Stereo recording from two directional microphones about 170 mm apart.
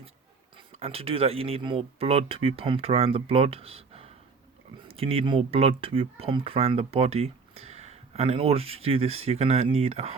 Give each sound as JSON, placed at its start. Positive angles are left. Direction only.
{"t": 0.5, "sound": "speech", "side_deg": -35}